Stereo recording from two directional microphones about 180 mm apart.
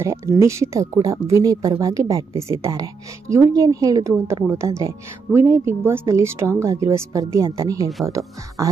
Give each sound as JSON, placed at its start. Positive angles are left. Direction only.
{"t": 0.0, "sound": "speech", "side_deg": -15}